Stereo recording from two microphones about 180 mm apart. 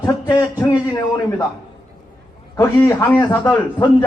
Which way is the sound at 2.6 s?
15° left (ahead or behind).